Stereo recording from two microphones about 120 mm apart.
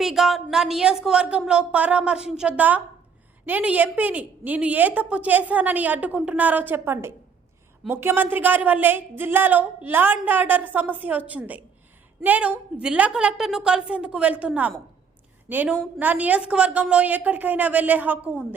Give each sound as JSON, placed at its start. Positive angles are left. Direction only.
{"t": 0.0, "sound": "speech", "side_deg": 0}